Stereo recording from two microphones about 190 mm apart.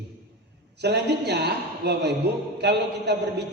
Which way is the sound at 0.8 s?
60° right (ahead or behind).